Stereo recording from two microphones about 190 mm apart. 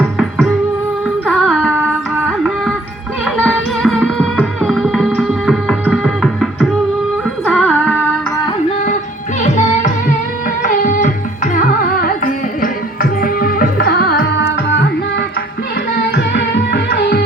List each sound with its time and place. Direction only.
0.2 s music: centre (ahead or behind)
9.4 s music: 40° left (ahead or behind); by 14.8 s 70° left (ahead or behind)
16.1 s music: 65° left (ahead or behind)